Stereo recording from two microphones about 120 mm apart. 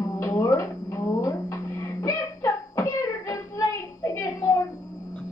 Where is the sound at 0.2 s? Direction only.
25° left (ahead or behind).